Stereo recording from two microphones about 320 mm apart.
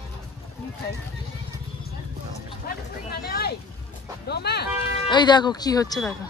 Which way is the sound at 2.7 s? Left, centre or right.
Left.